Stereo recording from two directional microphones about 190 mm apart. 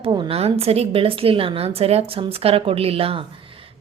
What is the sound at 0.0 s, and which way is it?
A woman's voice, 25° right (ahead or behind).